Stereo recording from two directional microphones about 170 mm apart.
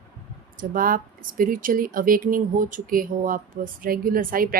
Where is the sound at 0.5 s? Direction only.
55° right (ahead or behind).